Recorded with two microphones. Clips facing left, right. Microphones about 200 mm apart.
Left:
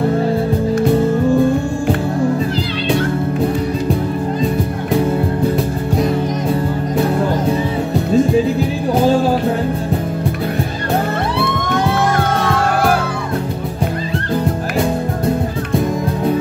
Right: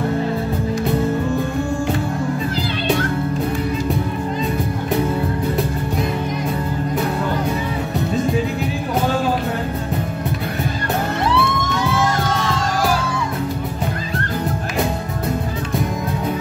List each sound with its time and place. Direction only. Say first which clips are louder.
11.3 s music: left 2 dB; 60° left (ahead or behind)